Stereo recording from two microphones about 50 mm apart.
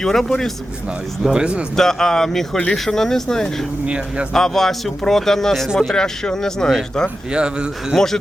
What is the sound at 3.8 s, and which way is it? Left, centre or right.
Speech, right.